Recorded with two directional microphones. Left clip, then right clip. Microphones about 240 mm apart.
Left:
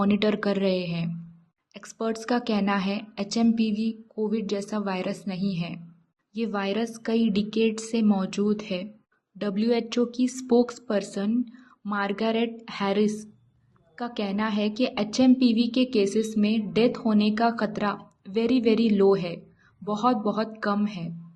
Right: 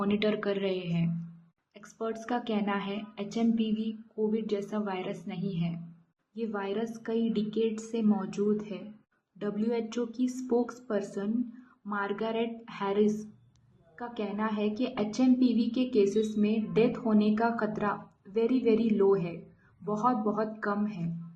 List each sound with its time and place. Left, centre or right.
0.0 s a woman's voice: left